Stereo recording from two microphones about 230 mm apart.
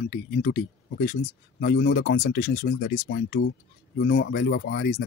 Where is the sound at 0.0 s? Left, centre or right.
Left.